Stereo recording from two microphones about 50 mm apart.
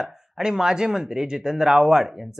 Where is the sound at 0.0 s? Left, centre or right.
Centre.